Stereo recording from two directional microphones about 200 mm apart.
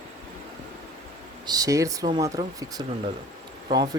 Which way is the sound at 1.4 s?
20° right (ahead or behind).